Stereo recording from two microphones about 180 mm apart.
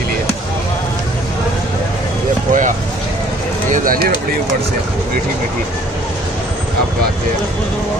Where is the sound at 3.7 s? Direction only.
50° right (ahead or behind).